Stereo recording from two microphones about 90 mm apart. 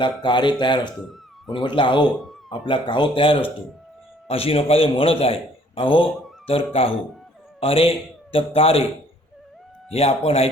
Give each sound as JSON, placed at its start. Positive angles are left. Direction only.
{"t": 0.0, "sound": "speech", "side_deg": 60}
{"t": 4.3, "sound": "a man's voice", "side_deg": 90}
{"t": 6.5, "sound": "a man's voice", "side_deg": 90}
{"t": 9.9, "sound": "a man's voice", "side_deg": 90}